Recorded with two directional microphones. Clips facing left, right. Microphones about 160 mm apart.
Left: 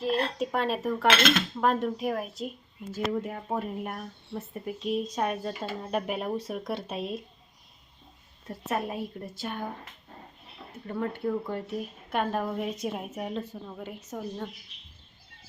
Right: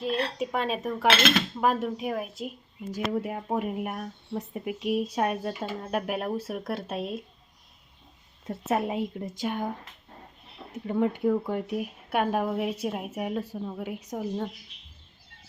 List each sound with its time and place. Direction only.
0.3 s dishes: centre (ahead or behind)
2.9 s speech: 10° right (ahead or behind)
5.8 s dishes: 5° right (ahead or behind)
8.4 s a woman's voice: 20° right (ahead or behind)
10.7 s speech: 15° right (ahead or behind)